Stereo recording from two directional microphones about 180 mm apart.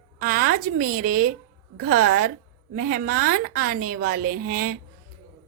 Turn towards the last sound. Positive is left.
turn(degrees=-55)  # may be behind; listen again after turning